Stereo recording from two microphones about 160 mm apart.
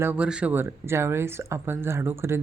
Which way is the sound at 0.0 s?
10° right (ahead or behind).